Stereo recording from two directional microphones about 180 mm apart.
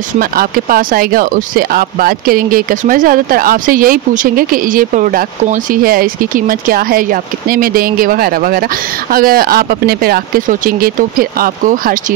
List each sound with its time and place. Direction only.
0.2 s speech: 50° right (ahead or behind)